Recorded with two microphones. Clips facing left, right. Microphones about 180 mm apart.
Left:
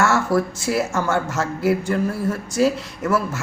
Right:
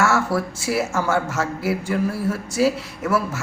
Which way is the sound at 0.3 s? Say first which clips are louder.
Left 2 dB; 5° right (ahead or behind).